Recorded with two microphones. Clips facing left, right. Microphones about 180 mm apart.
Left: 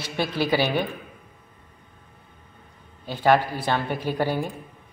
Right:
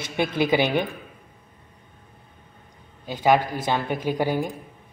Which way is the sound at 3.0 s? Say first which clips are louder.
Even; 15° right (ahead or behind).